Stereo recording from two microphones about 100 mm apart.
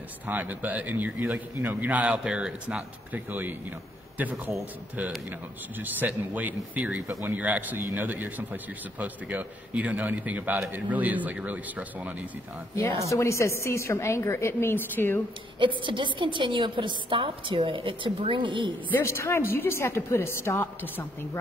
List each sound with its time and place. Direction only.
0.3 s a man's voice: 15° right (ahead or behind)
12.7 s a woman's voice: 30° left (ahead or behind)
15.6 s a woman's voice: 55° right (ahead or behind)
18.9 s a woman's voice: 25° left (ahead or behind)